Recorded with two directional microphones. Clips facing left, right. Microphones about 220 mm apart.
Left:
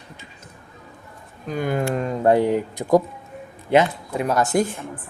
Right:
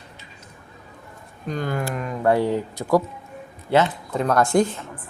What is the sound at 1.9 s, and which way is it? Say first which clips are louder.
Speech: left 2 dB; 30° left (ahead or behind).